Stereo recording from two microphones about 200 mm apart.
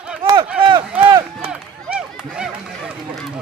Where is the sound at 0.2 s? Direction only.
25° right (ahead or behind).